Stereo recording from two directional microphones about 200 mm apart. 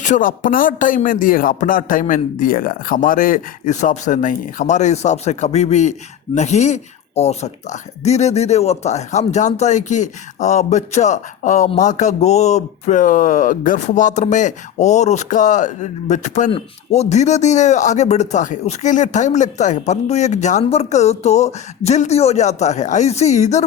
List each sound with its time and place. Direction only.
0.0 s a man's voice: 40° left (ahead or behind)